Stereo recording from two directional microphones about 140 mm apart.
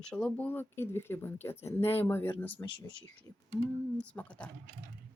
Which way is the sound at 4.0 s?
10° left (ahead or behind).